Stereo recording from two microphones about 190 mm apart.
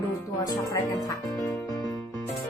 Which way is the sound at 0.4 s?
20° left (ahead or behind).